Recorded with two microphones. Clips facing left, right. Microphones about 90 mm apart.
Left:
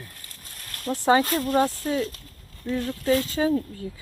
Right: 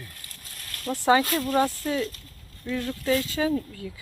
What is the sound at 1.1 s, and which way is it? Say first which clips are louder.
Speech: left 1 dB; 30° left (ahead or behind).